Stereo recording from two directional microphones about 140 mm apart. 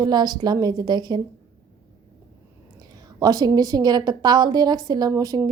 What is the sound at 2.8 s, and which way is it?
A woman's voice, 25° right (ahead or behind).